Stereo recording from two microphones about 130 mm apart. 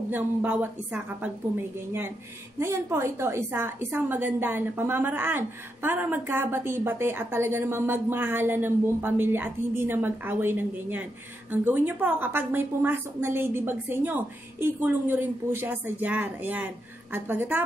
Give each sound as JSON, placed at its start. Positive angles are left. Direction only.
{"t": 0.1, "sound": "a woman's voice", "side_deg": -10}
{"t": 2.6, "sound": "a woman's voice", "side_deg": -20}